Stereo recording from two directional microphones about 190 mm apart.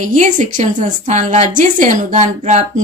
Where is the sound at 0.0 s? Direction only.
45° right (ahead or behind).